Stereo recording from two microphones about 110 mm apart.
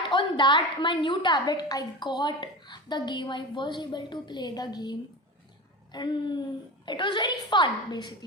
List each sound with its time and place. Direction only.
0.1 s a woman's voice: 45° left (ahead or behind)